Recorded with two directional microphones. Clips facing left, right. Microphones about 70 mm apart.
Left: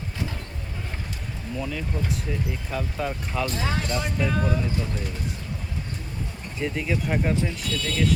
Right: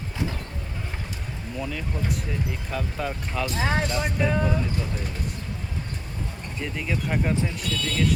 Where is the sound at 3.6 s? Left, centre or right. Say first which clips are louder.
Right 3 dB; right.